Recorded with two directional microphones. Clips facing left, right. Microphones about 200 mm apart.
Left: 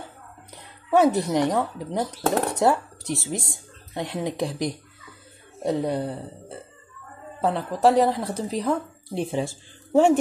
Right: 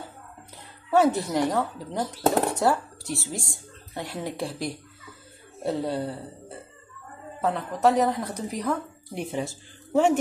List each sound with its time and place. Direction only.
0.8 s speech: 15° left (ahead or behind)
7.4 s a woman's voice: 30° left (ahead or behind)